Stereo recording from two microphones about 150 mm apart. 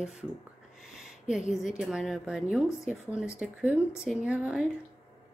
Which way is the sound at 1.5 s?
5° right (ahead or behind).